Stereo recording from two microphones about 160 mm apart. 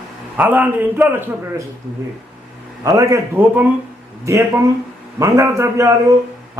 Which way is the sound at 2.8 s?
20° right (ahead or behind).